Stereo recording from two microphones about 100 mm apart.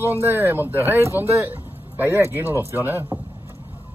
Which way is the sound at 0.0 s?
25° right (ahead or behind).